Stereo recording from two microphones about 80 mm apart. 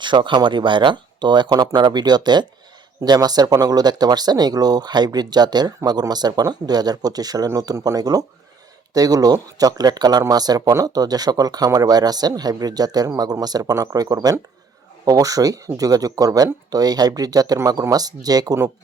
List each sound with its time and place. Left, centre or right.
0.0 s speech: right